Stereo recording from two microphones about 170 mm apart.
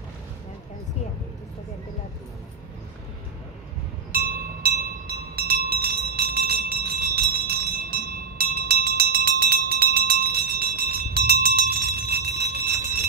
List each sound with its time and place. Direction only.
4.6 s train: 65° right (ahead or behind)